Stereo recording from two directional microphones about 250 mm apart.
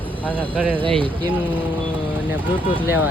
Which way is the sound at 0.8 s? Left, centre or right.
Right.